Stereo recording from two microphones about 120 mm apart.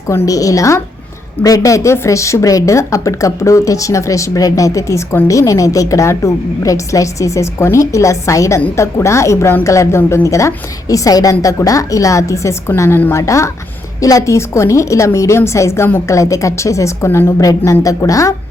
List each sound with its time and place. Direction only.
0.3 s a woman's voice: 30° left (ahead or behind)